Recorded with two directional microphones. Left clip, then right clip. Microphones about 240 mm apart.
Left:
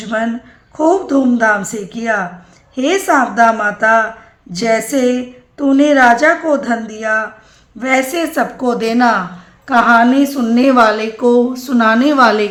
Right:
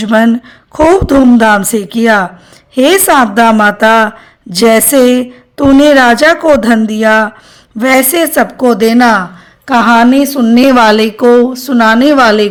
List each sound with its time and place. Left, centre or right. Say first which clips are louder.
0.0 s a woman's voice: right 9 dB; right